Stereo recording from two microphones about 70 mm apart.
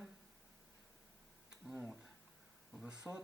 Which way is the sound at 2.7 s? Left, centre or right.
Centre.